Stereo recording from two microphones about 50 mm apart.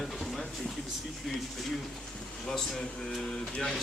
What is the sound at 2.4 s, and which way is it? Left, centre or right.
Speech, centre.